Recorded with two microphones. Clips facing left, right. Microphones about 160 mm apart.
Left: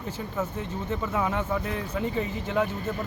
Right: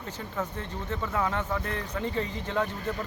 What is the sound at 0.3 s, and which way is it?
Speech, 10° left (ahead or behind).